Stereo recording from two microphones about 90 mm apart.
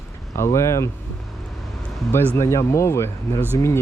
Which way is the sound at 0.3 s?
30° left (ahead or behind).